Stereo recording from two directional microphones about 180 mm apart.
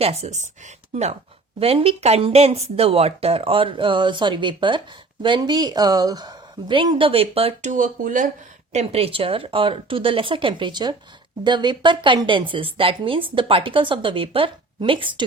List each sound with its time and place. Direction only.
0.0 s speech: 35° right (ahead or behind)
1.5 s a woman's voice: 30° right (ahead or behind)
8.7 s a woman's voice: 35° right (ahead or behind)